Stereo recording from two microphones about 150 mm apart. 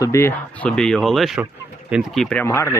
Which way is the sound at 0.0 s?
20° left (ahead or behind).